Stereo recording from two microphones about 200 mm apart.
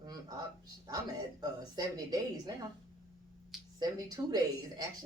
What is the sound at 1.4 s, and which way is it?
A woman's voice, 20° right (ahead or behind).